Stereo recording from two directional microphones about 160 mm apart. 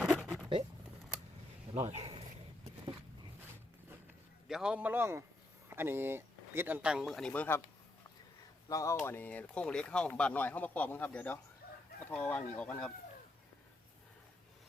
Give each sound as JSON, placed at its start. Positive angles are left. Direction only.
{"t": 0.0, "sound": "a sound", "side_deg": 0}
{"t": 1.7, "sound": "speech", "side_deg": -40}
{"t": 4.4, "sound": "speech", "side_deg": -5}
{"t": 8.7, "sound": "speech", "side_deg": 20}